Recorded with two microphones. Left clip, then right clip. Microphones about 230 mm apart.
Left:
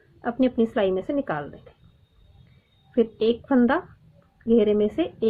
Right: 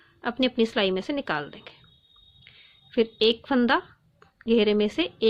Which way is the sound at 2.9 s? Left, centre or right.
Right.